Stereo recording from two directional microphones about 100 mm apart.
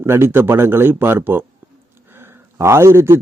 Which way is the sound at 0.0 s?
25° right (ahead or behind).